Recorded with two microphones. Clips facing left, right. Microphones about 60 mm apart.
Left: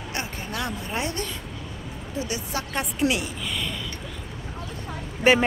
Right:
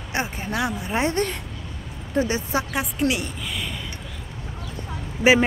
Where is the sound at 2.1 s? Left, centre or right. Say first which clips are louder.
Right 8 dB; right.